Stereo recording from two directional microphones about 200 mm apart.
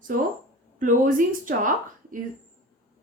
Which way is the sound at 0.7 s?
40° right (ahead or behind).